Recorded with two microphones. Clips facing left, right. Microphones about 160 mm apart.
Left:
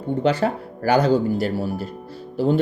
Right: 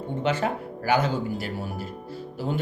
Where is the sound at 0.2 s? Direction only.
35° left (ahead or behind).